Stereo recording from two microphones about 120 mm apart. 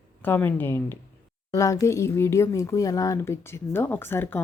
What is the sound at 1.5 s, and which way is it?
Speech, 25° left (ahead or behind).